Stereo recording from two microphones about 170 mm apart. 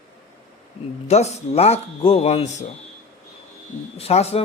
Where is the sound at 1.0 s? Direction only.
40° left (ahead or behind).